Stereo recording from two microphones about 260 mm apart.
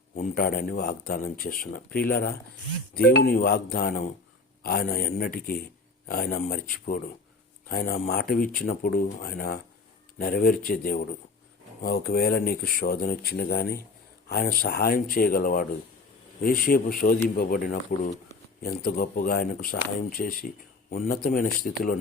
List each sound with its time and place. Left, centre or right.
0.2 s speech: left